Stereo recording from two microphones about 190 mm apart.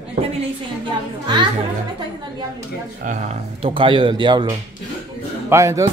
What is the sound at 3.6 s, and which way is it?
Speech, 30° right (ahead or behind).